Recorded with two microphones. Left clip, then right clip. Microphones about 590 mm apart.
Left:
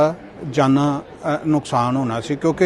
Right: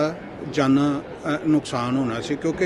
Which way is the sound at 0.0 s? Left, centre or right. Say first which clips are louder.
Left 6 dB; left.